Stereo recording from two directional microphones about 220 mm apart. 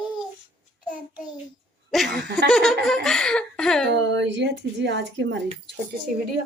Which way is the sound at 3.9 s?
50° right (ahead or behind).